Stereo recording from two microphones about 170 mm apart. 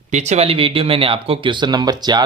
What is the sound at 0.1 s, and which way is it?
A man's voice, 40° right (ahead or behind).